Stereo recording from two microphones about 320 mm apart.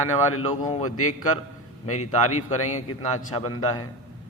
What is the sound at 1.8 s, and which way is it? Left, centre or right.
A man's voice, left.